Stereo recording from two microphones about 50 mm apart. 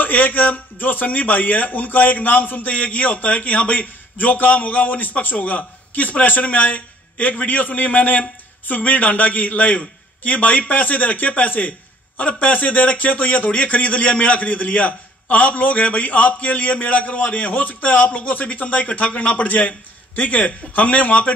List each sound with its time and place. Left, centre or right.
0.0 s a man's voice: left